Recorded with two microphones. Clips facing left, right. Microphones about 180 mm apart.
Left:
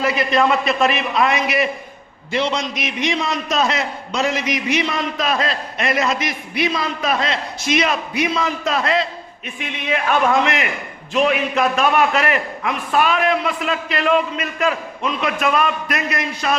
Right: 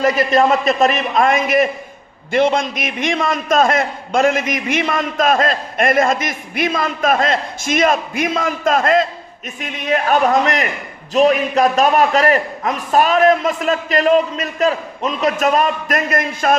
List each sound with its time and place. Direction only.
0.0 s a man's voice: 45° right (ahead or behind)